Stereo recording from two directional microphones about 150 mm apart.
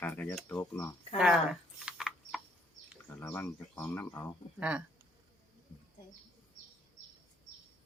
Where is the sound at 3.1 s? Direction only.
15° left (ahead or behind).